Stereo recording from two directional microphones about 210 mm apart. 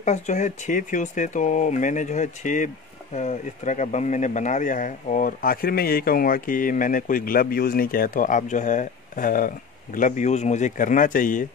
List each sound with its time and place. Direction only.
0.0 s speech: 35° left (ahead or behind)